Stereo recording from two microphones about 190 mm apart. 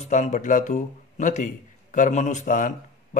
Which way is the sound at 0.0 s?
40° left (ahead or behind).